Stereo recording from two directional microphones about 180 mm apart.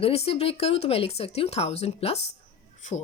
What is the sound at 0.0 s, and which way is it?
Speech, 35° left (ahead or behind).